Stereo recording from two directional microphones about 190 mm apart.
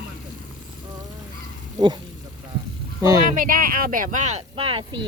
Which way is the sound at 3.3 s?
45° right (ahead or behind).